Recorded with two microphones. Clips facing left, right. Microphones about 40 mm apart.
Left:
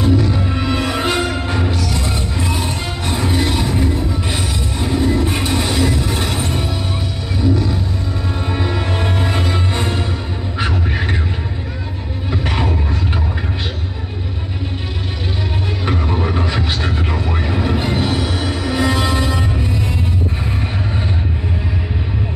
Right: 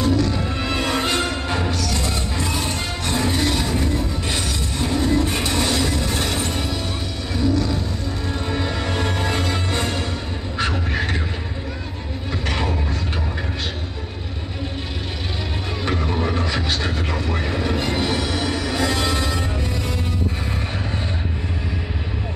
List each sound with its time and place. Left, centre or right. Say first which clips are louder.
0.0 s music: left 3 dB; centre
7.4 s vehicle: left 3 dB; centre
8.5 s music: left 3 dB; centre
12.3 s a sound: left 4 dB; centre
15.8 s music: left 2 dB; centre